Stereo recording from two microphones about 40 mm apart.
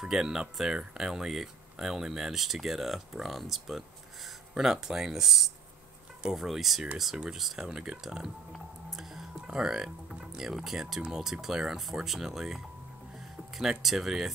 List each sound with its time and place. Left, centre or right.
0.0 s speech: centre
7.6 s speech: centre
8.9 s a sound: centre
9.5 s speech: centre